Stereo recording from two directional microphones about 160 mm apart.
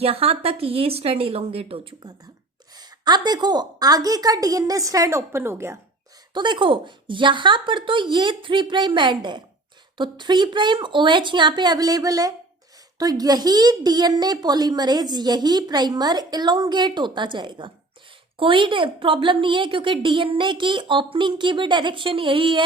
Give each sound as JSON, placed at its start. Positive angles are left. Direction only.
{"t": 0.0, "sound": "a woman's voice", "side_deg": -35}
{"t": 6.3, "sound": "a woman's voice", "side_deg": -30}